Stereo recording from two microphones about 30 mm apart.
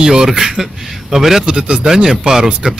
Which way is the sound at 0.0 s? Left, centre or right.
Centre.